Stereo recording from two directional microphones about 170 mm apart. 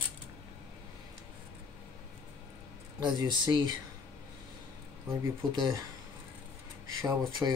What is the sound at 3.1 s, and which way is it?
Speech, 25° right (ahead or behind).